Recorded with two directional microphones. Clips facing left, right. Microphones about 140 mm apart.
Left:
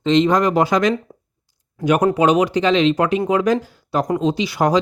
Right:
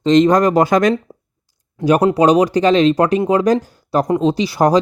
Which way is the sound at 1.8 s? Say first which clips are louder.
Right 3 dB; 35° right (ahead or behind).